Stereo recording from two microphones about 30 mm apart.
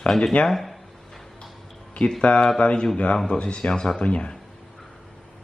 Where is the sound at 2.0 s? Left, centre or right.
Left.